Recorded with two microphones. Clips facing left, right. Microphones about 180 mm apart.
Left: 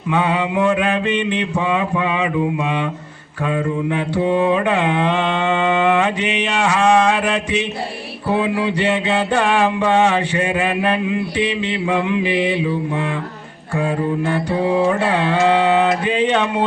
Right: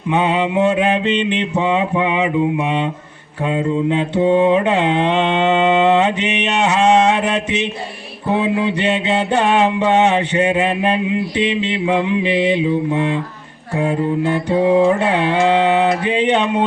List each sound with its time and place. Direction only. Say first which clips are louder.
0.1 s mantra: right 2 dB; 20° right (ahead or behind)